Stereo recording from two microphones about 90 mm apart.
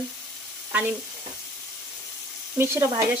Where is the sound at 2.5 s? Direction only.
30° right (ahead or behind).